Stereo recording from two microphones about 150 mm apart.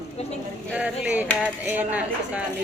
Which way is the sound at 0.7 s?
10° right (ahead or behind).